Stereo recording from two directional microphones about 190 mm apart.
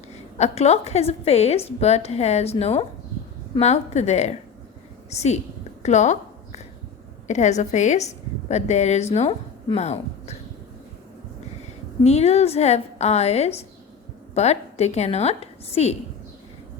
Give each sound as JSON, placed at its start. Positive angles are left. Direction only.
{"t": 0.3, "sound": "a woman's voice", "side_deg": 35}
{"t": 5.8, "sound": "a sound", "side_deg": 35}
{"t": 7.3, "sound": "a woman's voice", "side_deg": 40}
{"t": 12.0, "sound": "a woman's voice", "side_deg": 35}